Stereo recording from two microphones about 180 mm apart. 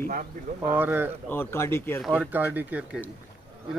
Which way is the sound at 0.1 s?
50° right (ahead or behind).